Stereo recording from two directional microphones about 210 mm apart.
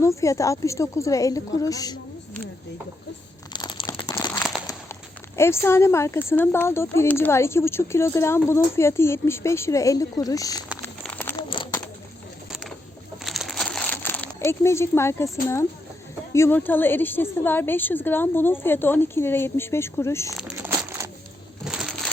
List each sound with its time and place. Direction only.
0.0 s speech: 15° left (ahead or behind)
3.5 s crumpling: 20° left (ahead or behind)
4.5 s a sound: centre (ahead or behind)
5.4 s speech: 10° left (ahead or behind)
10.8 s a sound: 10° left (ahead or behind)
11.3 s a sound: 25° left (ahead or behind)
13.2 s crumpling: centre (ahead or behind)
16.3 s speech: 10° left (ahead or behind)
20.3 s crumpling: 10° right (ahead or behind)
21.6 s crushing: 5° right (ahead or behind)